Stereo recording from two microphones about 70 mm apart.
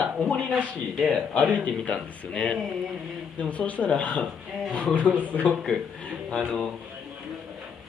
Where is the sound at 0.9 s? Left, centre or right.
Centre.